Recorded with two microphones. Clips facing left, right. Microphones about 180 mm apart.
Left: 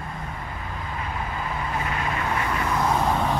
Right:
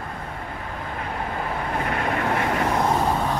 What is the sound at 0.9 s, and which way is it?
Vehicle, 55° right (ahead or behind).